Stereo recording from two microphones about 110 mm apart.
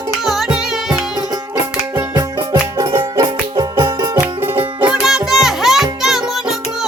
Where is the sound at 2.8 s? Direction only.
40° right (ahead or behind).